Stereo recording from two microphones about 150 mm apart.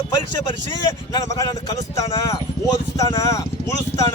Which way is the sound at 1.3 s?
25° left (ahead or behind).